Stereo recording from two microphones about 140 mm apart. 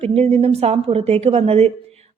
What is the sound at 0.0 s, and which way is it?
Speech, 45° right (ahead or behind).